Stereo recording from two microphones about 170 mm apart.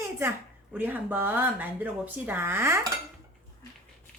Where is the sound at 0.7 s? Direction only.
10° right (ahead or behind).